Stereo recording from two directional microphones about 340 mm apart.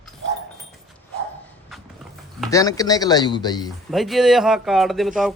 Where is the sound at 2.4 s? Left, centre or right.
Centre.